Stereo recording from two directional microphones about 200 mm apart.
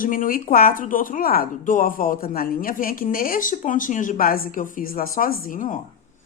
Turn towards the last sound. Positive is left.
turn(degrees=40)  # may be behind; listen again after turning